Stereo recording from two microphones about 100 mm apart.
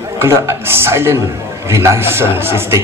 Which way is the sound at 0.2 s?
25° right (ahead or behind).